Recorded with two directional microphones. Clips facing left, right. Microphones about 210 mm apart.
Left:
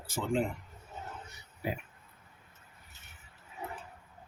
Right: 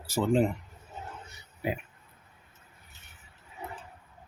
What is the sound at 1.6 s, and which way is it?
Speech, 20° right (ahead or behind).